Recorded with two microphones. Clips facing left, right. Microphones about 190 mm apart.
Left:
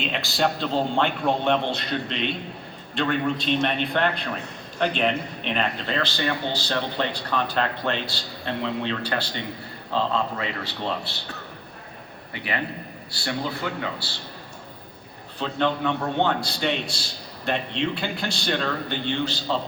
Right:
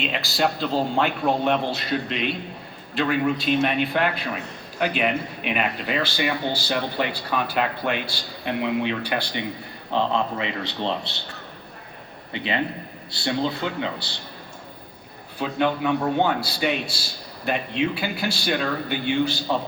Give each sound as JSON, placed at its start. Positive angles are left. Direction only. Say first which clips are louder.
{"t": 0.0, "sound": "a man's voice", "louder": "right 1 dB", "side_deg": 0}
{"t": 12.3, "sound": "speech", "louder": "right 4 dB", "side_deg": -25}
{"t": 15.4, "sound": "a man's voice", "louder": "right 1 dB", "side_deg": -10}